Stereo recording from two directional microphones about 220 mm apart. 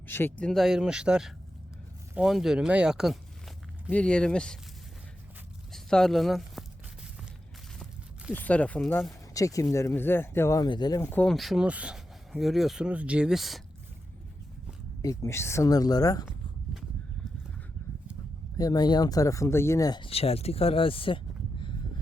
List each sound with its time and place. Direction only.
0.1 s speech: 10° left (ahead or behind)
5.7 s a sound: centre (ahead or behind)
8.3 s speech: 5° left (ahead or behind)
15.0 s speech: 15° left (ahead or behind)
18.5 s speech: 15° left (ahead or behind)